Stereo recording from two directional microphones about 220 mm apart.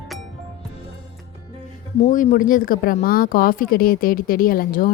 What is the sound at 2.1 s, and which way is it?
A woman's voice, 35° left (ahead or behind).